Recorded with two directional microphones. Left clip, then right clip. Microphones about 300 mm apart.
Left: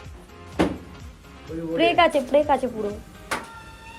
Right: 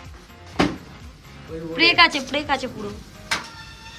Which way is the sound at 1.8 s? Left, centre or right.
Centre.